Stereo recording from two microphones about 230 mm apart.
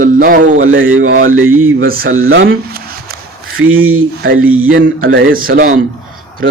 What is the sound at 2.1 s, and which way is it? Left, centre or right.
Speech, right.